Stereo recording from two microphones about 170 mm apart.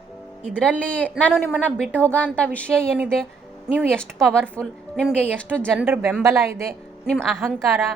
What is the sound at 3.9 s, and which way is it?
Speech, 5° left (ahead or behind).